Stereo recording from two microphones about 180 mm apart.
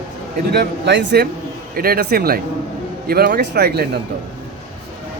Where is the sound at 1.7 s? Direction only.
55° right (ahead or behind).